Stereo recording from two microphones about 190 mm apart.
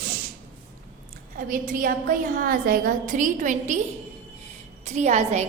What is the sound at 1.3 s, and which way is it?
A woman's voice, 50° right (ahead or behind).